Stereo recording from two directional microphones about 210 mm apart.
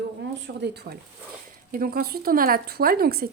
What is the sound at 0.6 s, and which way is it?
Speech, 50° right (ahead or behind).